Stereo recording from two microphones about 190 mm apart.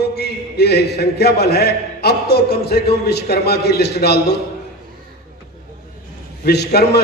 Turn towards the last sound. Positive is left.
turn(degrees=60)  # may be behind; listen again after turning